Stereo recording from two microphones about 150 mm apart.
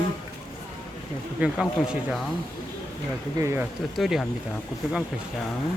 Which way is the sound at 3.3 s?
20° right (ahead or behind).